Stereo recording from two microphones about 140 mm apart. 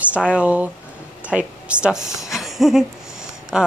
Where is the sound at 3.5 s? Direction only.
5° right (ahead or behind).